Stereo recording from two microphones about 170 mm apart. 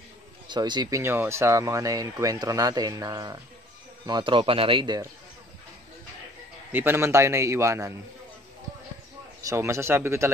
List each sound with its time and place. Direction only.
0.5 s speech: 25° right (ahead or behind)
6.7 s a man's voice: 10° right (ahead or behind)
9.5 s a man's voice: 15° right (ahead or behind)